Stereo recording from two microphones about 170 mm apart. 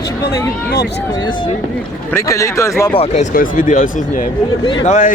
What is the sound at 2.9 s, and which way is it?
Speech, 40° left (ahead or behind).